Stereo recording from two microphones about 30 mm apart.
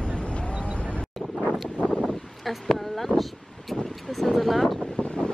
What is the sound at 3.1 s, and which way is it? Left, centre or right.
Vehicle, left.